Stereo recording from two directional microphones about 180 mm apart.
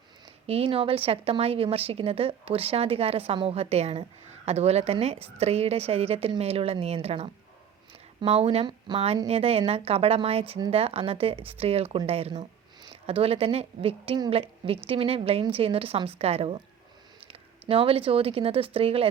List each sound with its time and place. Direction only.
0.4 s a woman's voice: 35° right (ahead or behind)